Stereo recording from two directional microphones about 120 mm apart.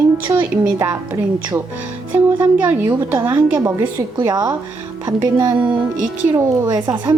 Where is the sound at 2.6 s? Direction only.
10° right (ahead or behind).